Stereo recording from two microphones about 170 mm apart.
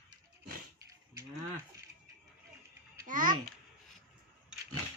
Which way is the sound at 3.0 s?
50° right (ahead or behind).